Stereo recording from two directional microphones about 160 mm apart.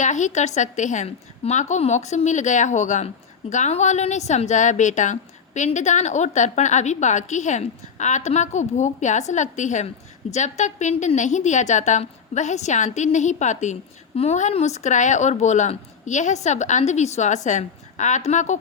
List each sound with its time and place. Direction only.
0.0 s speech: 50° left (ahead or behind)